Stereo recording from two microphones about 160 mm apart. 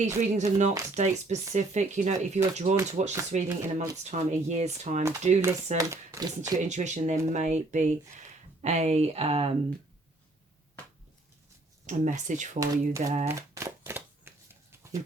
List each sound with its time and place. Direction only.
0.0 s speech: 45° right (ahead or behind)
5.7 s speech: 20° right (ahead or behind)
6.7 s speech: 50° right (ahead or behind)
11.9 s speech: 50° right (ahead or behind)
12.5 s speech: 20° right (ahead or behind)
13.2 s shuffling cards: 15° right (ahead or behind)